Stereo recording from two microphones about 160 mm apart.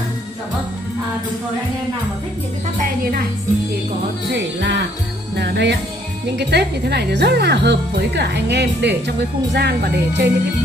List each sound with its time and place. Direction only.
4.3 s speech: 90° right